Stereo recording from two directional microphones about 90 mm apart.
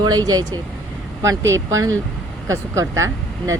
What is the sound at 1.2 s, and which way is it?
Speech, 35° right (ahead or behind).